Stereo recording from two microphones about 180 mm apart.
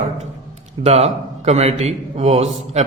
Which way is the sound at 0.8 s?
35° right (ahead or behind).